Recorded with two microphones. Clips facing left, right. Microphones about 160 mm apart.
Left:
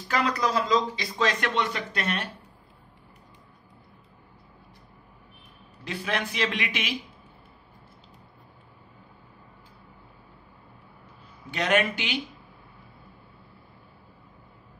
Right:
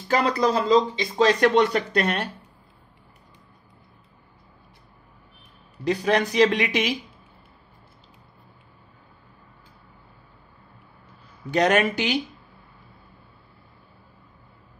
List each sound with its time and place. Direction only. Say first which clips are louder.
0.1 s speech: right 5 dB; 30° right (ahead or behind)
5.9 s speech: right 9 dB; 40° right (ahead or behind)
11.5 s speech: right 5 dB; 40° right (ahead or behind)